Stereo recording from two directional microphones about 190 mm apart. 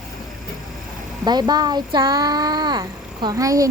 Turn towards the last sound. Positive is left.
turn(degrees=-20)  # may be behind; listen again after turning